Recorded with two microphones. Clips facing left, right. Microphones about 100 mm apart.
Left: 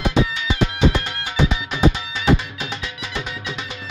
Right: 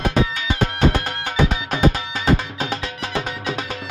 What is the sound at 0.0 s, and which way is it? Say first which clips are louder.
Music: even; 45° right (ahead or behind).